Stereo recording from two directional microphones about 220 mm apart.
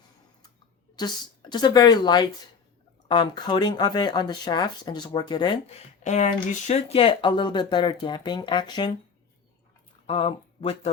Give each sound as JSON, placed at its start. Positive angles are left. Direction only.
{"t": 0.9, "sound": "speech", "side_deg": 20}
{"t": 10.1, "sound": "speech", "side_deg": 25}